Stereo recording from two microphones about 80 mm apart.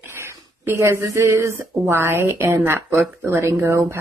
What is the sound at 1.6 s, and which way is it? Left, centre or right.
Speech, right.